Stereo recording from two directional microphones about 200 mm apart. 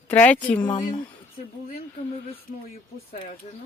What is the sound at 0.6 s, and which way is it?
Speech, 25° left (ahead or behind).